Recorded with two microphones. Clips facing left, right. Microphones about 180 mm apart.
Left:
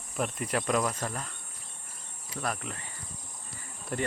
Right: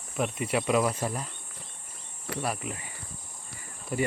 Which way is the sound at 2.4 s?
10° right (ahead or behind).